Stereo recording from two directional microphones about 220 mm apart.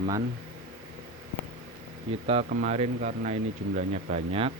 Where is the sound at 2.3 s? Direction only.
30° right (ahead or behind).